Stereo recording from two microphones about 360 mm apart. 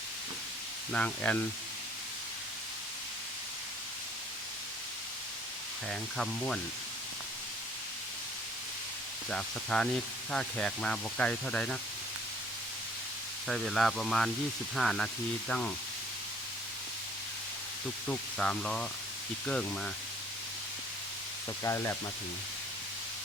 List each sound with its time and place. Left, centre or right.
0.9 s speech: centre
5.9 s speech: centre
9.3 s speech: centre
13.5 s speech: centre
18.1 s speech: centre
21.6 s speech: centre